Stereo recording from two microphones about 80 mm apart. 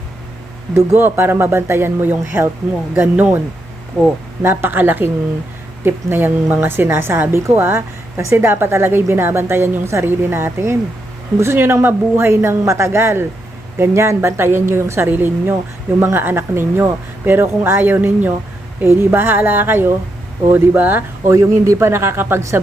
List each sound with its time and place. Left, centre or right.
0.9 s a woman's voice: right
4.4 s a woman's voice: right
21.2 s speech: right